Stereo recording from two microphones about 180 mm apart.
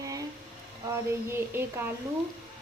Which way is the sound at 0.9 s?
15° right (ahead or behind).